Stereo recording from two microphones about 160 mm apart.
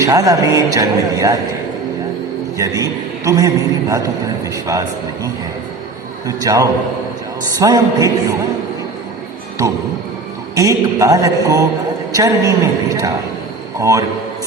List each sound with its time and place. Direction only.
0.0 s a man's voice: 20° right (ahead or behind)
2.6 s a man's voice: 20° right (ahead or behind)
10.5 s a man's voice: 20° right (ahead or behind)